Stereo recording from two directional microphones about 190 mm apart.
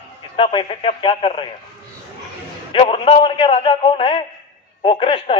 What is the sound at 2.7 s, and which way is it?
Speech, 30° left (ahead or behind).